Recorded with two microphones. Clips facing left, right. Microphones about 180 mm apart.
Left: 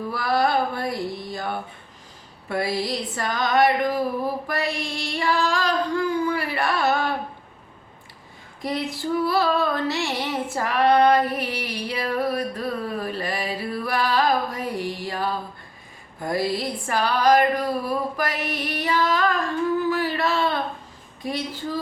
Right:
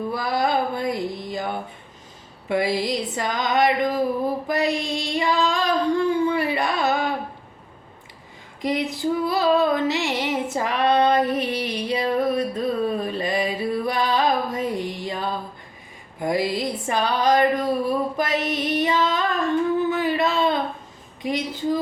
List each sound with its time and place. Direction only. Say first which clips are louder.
0.1 s a sound: left 2 dB; 20° right (ahead or behind)
4.4 s female singing: right 4 dB; 20° right (ahead or behind)
8.6 s female singing: right 3 dB; 20° right (ahead or behind)
16.2 s music: right 2 dB; 15° right (ahead or behind)
21.2 s a woman's voice: right 3 dB; 20° right (ahead or behind)